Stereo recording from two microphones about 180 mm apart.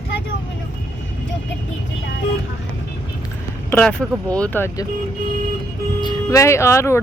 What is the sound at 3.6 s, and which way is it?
Speech, 10° left (ahead or behind).